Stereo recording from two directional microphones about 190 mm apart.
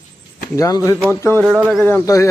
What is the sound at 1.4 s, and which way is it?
Speech, centre (ahead or behind).